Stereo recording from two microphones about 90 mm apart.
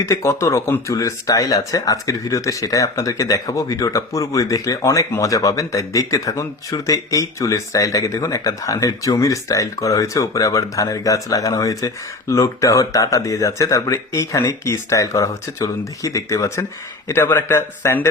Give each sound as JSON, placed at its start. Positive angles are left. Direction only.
{"t": 0.0, "sound": "a man's voice", "side_deg": 35}